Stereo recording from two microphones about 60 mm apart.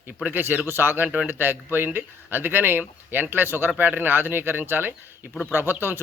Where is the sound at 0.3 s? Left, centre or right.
Right.